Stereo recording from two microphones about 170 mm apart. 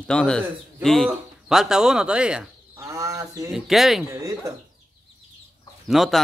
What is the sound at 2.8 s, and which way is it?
Speech, 20° right (ahead or behind).